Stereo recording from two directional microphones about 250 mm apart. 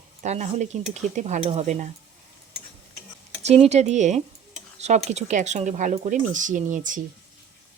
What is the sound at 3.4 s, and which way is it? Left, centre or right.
Speech, right.